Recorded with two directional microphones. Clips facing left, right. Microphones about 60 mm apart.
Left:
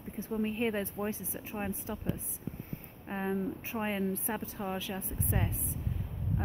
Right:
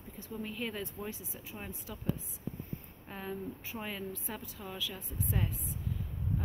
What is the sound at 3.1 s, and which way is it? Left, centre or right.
Speech, left.